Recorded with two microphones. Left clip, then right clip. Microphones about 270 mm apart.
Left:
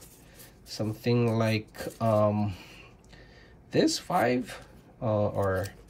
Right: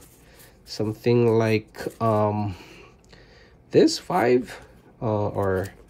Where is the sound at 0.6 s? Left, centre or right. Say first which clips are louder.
Right 7 dB; right.